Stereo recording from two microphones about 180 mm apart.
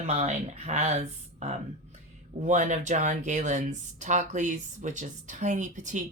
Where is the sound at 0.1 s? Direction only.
35° right (ahead or behind).